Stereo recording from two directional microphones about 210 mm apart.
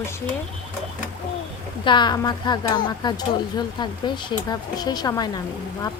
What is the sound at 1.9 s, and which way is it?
Speech, 20° left (ahead or behind).